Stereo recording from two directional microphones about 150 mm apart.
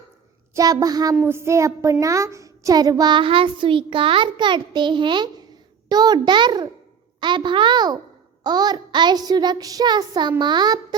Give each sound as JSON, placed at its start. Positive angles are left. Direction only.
{"t": 0.5, "sound": "child singing", "side_deg": -25}
{"t": 1.1, "sound": "a child's voice", "side_deg": -15}
{"t": 5.9, "sound": "child singing", "side_deg": -25}
{"t": 7.2, "sound": "a child's voice", "side_deg": -30}
{"t": 8.4, "sound": "child singing", "side_deg": -25}